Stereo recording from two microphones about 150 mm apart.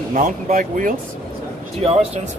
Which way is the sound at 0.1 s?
70° right (ahead or behind).